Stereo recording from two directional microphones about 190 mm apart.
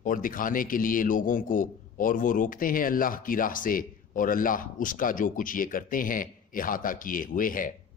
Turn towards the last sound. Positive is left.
turn(degrees=45)  # may be behind; listen again after turning